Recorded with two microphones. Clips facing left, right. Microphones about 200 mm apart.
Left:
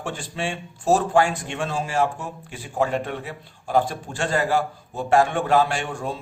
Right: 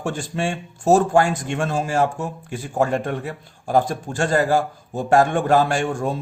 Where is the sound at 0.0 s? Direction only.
45° right (ahead or behind).